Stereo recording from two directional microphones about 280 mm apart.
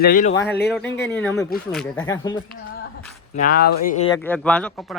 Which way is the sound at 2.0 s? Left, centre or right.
Centre.